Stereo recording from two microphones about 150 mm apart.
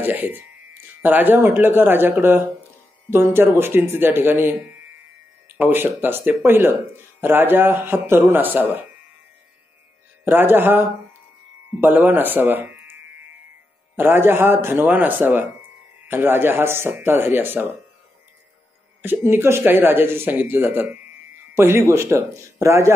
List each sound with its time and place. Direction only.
0.0 s speech: 15° right (ahead or behind)
10.2 s speech: 15° right (ahead or behind)
13.9 s speech: 15° right (ahead or behind)
19.0 s speech: 15° right (ahead or behind)